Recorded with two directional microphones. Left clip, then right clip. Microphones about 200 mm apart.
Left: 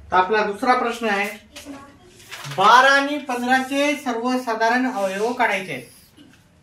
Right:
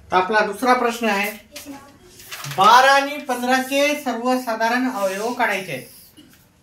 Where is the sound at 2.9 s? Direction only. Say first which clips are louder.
Right 1 dB; 20° right (ahead or behind).